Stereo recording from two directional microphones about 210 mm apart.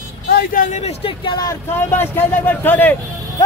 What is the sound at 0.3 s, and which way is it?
Speech, 45° left (ahead or behind).